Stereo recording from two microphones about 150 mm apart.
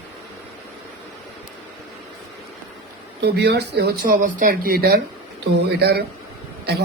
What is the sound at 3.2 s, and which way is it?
A man's voice, 90° right.